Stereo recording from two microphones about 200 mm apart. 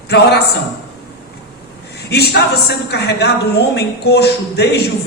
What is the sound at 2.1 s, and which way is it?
A woman's voice, 55° left (ahead or behind).